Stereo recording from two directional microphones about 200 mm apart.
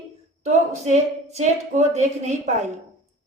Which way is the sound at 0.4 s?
35° right (ahead or behind).